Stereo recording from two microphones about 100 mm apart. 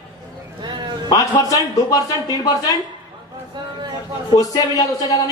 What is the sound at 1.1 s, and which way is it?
Speech, 40° left (ahead or behind).